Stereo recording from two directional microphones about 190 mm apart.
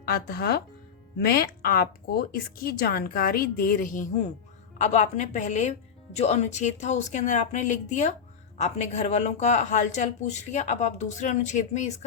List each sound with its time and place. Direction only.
0.0 s a woman's voice: 55° left (ahead or behind)